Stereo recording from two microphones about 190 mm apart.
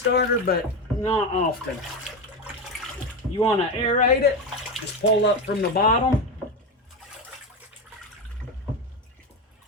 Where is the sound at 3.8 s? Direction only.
40° left (ahead or behind).